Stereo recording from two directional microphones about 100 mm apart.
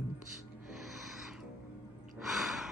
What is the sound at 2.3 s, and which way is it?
Sigh, 5° right (ahead or behind).